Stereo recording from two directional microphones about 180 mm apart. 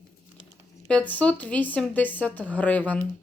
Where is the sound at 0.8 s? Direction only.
5° left (ahead or behind).